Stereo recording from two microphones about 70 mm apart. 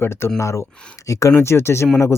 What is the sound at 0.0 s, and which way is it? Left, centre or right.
Speech, left.